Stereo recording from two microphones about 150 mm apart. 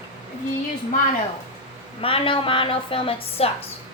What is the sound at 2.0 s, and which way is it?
A woman's voice, 35° left (ahead or behind).